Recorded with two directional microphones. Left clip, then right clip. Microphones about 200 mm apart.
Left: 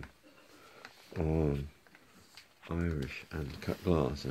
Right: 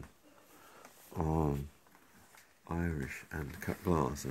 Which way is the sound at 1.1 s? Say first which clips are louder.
Left 1 dB; 60° right (ahead or behind).